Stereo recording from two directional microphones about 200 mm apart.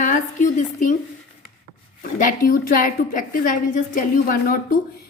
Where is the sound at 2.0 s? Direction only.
45° left (ahead or behind).